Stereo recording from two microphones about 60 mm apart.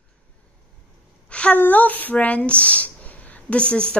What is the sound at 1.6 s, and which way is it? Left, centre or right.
Speech, left.